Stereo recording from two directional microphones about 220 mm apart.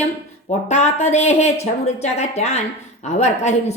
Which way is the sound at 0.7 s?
30° left (ahead or behind).